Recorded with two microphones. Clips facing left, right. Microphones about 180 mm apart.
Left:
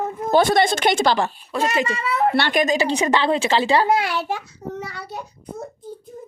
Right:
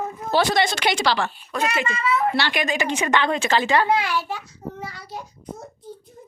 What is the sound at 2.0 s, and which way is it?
Speech, 65° left (ahead or behind).